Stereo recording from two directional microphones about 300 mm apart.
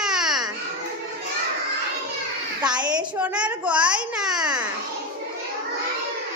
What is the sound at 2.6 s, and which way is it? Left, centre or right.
Speech, centre.